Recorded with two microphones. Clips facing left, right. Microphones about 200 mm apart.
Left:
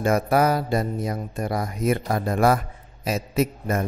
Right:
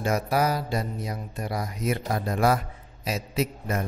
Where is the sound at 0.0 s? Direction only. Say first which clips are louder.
Left 5 dB; 55° left (ahead or behind).